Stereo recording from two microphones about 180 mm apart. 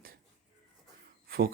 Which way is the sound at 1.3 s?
55° right (ahead or behind).